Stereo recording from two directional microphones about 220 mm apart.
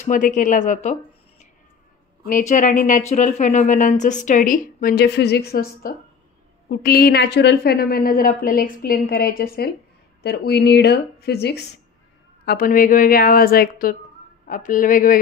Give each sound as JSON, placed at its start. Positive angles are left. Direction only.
{"t": 0.0, "sound": "speech", "side_deg": 35}
{"t": 2.2, "sound": "a woman's voice", "side_deg": 35}